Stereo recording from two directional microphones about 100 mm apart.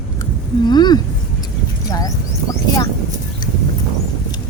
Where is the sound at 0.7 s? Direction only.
45° left (ahead or behind).